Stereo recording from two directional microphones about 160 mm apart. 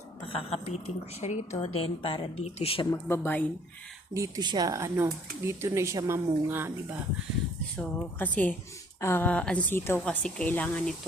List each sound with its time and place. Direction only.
0.5 s a woman's voice: 40° left (ahead or behind)
3.1 s a woman's voice: 10° left (ahead or behind)
4.1 s speech: 20° right (ahead or behind)
7.8 s a woman's voice: 5° left (ahead or behind)